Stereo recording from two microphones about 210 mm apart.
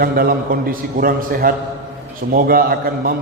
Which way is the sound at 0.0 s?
45° right (ahead or behind).